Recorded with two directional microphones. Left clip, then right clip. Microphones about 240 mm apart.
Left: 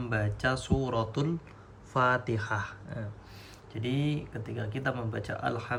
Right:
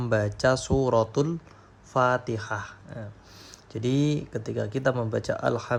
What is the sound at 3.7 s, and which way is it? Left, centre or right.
Speech, centre.